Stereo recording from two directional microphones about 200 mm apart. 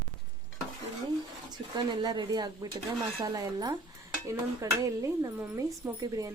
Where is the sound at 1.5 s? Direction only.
20° right (ahead or behind).